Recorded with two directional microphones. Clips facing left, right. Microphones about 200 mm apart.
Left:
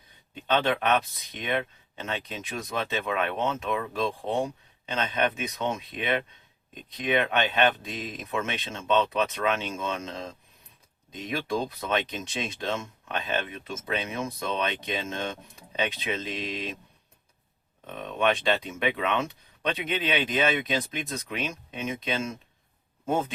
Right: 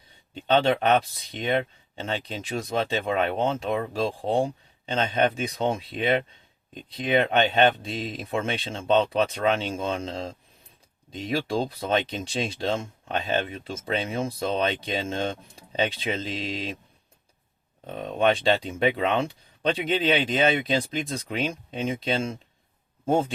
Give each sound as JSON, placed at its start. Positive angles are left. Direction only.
{"t": 0.4, "sound": "speech", "side_deg": -30}
{"t": 17.8, "sound": "speech", "side_deg": -35}